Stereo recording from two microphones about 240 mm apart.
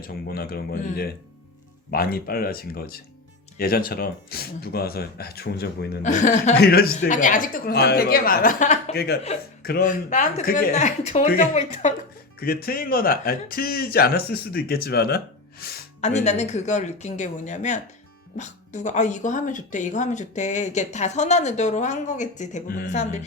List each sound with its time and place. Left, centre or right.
0.1 s speech: left
6.6 s speech: left
16.0 s speech: left